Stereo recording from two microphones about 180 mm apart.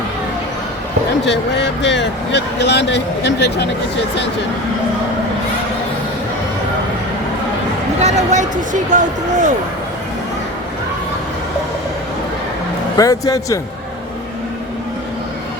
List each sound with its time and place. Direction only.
1.2 s speech: 75° left (ahead or behind)
8.0 s speech: 40° right (ahead or behind)
13.0 s speech: 20° left (ahead or behind)